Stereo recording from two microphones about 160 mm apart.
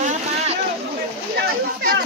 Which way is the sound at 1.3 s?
75° right (ahead or behind).